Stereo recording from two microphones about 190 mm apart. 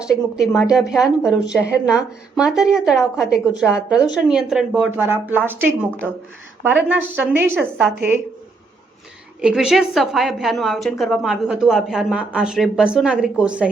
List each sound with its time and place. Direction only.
0.3 s a woman's voice: centre (ahead or behind)
1.4 s a woman's voice: 65° left (ahead or behind)
1.9 s a woman's voice: 5° right (ahead or behind)
9.4 s a woman's voice: 5° right (ahead or behind)